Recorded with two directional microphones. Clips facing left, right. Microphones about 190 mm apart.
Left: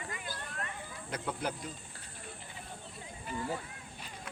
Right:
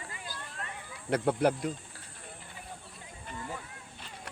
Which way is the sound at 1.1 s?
70° right (ahead or behind).